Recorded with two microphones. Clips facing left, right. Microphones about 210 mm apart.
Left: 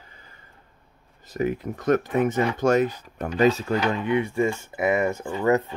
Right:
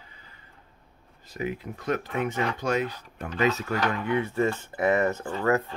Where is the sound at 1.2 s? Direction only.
45° left (ahead or behind); by 3.8 s 30° left (ahead or behind).